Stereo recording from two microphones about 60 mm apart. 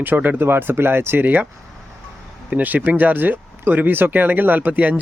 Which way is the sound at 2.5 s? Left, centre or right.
Right.